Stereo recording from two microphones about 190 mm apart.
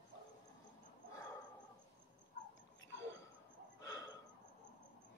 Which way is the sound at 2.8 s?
80° left.